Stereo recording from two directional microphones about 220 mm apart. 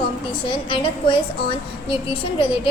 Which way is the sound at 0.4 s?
20° left (ahead or behind).